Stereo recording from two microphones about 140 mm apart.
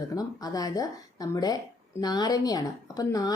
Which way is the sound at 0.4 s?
25° left (ahead or behind).